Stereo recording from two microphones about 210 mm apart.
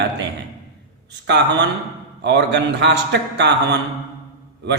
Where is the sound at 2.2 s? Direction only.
55° right (ahead or behind).